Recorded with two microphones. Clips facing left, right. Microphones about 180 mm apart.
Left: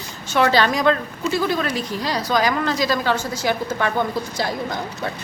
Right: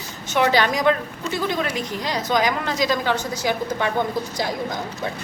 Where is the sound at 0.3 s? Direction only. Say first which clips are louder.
Left 1 dB; 15° right (ahead or behind).